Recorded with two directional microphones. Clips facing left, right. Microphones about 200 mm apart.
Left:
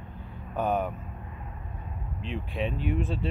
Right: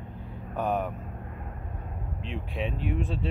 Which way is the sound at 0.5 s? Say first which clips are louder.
Left 1 dB; centre (ahead or behind).